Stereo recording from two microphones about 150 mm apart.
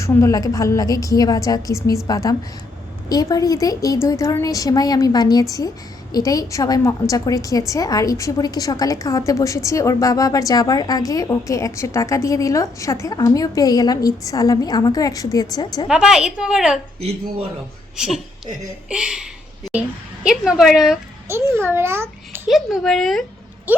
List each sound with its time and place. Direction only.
0.0 s a woman's voice: 20° left (ahead or behind)
15.9 s a woman's voice: 5° right (ahead or behind)
17.0 s speech: 40° right (ahead or behind)
17.9 s a woman's voice: 5° right (ahead or behind)
21.2 s a child's voice: 15° right (ahead or behind)
22.4 s a woman's voice: centre (ahead or behind)
23.7 s speech: 10° right (ahead or behind)